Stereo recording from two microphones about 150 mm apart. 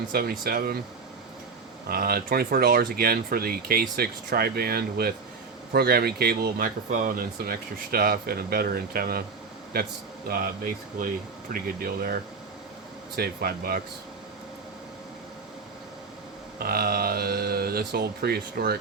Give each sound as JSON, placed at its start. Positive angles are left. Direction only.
{"t": 0.1, "sound": "speech", "side_deg": -85}
{"t": 1.9, "sound": "speech", "side_deg": -90}
{"t": 10.3, "sound": "speech", "side_deg": -90}
{"t": 11.0, "sound": "speech", "side_deg": -65}
{"t": 13.1, "sound": "speech", "side_deg": -90}
{"t": 16.6, "sound": "speech", "side_deg": -90}